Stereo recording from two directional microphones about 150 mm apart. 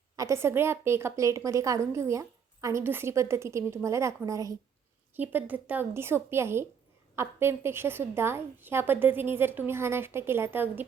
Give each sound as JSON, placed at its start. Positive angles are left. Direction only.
{"t": 0.2, "sound": "a woman's voice", "side_deg": -20}